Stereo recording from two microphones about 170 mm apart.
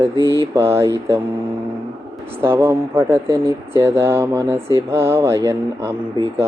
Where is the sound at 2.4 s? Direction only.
15° right (ahead or behind).